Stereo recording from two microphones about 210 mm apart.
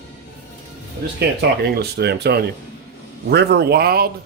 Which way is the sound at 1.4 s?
50° right (ahead or behind).